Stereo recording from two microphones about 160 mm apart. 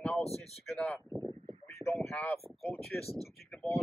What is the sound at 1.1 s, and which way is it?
Speech, 20° left (ahead or behind).